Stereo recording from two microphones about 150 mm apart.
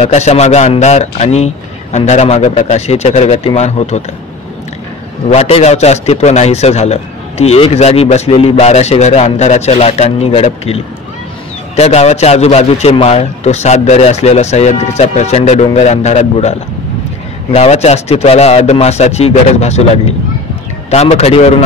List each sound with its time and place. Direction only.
0.0 s a man's voice: 50° left (ahead or behind)
5.3 s a man's voice: 45° left (ahead or behind)